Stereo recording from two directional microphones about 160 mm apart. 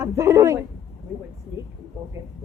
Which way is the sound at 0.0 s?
20° right (ahead or behind).